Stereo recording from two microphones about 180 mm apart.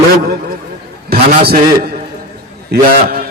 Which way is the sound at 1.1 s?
60° right (ahead or behind).